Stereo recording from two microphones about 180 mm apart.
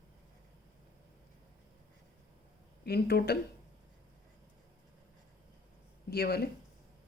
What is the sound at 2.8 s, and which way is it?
Speech, 60° left (ahead or behind).